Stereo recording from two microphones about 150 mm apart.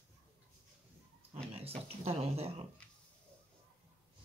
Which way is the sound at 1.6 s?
40° right (ahead or behind).